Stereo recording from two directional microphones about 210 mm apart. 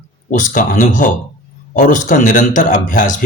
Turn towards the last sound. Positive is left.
turn(degrees=40)  # may be behind; listen again after turning